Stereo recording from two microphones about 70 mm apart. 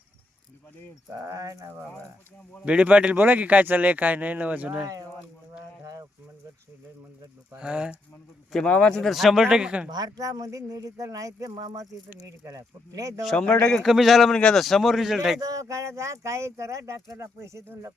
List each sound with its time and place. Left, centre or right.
1.2 s speech: right
2.6 s speech: centre
5.8 s a sound: right
7.5 s speech: centre
8.5 s speech: centre
9.0 s speech: centre
9.9 s speech: right
13.3 s speech: centre
13.8 s speech: centre
15.4 s speech: right